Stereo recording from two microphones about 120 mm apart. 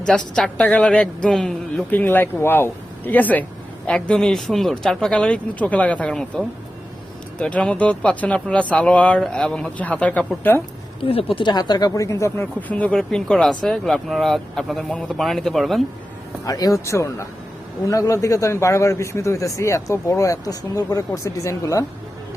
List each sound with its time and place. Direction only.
0.0 s a woman's voice: 5° left (ahead or behind)
11.1 s speech: 50° left (ahead or behind); by 12.5 s 25° left (ahead or behind)
12.5 s speech: 10° left (ahead or behind)
16.5 s speech: 30° left (ahead or behind)